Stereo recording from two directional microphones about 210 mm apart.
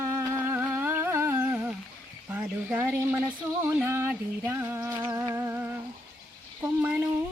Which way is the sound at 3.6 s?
10° right (ahead or behind).